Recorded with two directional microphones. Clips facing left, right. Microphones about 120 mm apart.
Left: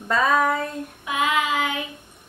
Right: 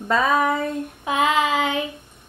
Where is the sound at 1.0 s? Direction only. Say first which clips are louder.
Right 3 dB; 25° right (ahead or behind).